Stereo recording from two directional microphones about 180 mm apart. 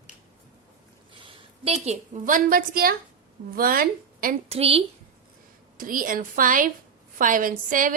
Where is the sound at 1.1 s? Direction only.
30° right (ahead or behind); by 4.3 s 50° right (ahead or behind).